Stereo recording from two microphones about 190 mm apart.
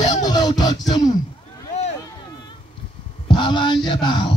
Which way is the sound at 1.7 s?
35° left (ahead or behind).